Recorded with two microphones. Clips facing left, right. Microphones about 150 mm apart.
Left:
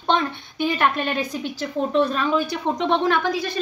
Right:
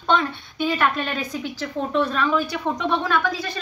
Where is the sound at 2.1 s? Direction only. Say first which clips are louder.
Even; 25° left (ahead or behind).